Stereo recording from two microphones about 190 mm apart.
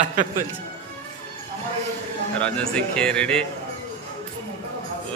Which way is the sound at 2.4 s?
5° left (ahead or behind).